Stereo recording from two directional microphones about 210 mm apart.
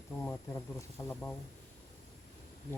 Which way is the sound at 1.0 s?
15° left (ahead or behind).